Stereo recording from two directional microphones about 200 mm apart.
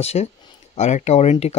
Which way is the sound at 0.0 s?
30° left (ahead or behind).